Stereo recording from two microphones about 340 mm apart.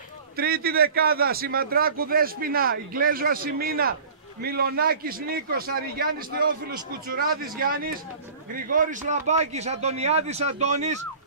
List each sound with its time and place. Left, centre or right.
0.4 s a man's voice: right
7.5 s a man's voice: right